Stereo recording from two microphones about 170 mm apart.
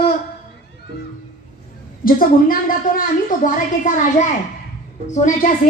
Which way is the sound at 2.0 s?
55° left (ahead or behind).